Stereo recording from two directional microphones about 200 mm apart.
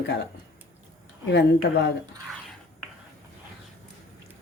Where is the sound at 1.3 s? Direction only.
60° left (ahead or behind).